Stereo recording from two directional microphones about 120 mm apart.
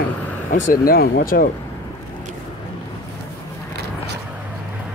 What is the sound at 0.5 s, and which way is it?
Speech, 90° left.